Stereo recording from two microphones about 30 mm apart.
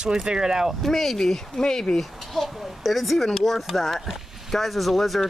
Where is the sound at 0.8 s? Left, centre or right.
Centre.